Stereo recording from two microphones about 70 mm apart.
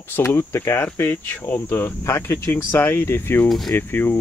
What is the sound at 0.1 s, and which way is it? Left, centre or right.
Speech, left.